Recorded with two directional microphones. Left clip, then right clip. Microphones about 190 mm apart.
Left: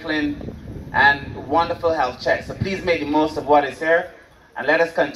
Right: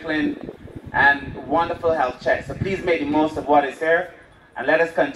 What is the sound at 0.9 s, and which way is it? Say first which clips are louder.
A man's voice: left 1 dB; 35° right (ahead or behind).